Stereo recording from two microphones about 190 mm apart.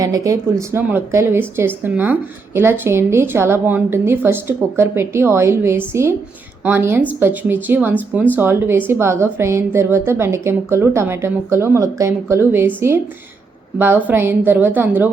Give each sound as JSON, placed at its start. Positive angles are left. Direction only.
{"t": 0.0, "sound": "a woman's voice", "side_deg": -15}